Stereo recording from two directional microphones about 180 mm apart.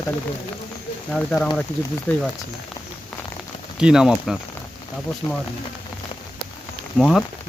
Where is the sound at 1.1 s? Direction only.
5° left (ahead or behind).